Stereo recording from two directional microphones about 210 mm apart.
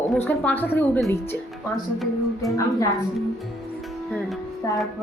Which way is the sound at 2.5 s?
15° left (ahead or behind).